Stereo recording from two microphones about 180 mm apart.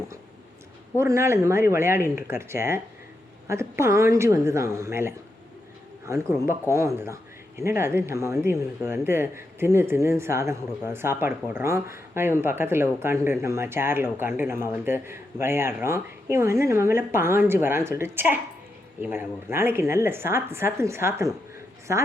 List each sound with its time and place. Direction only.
0.9 s speech: 15° right (ahead or behind)
6.4 s speech: 15° right (ahead or behind)